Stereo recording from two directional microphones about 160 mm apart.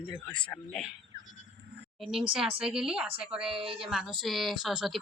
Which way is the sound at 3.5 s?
35° right (ahead or behind).